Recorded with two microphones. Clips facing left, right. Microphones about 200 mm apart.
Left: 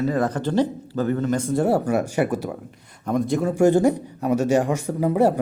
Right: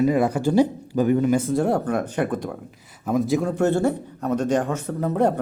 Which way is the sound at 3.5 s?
15° left (ahead or behind).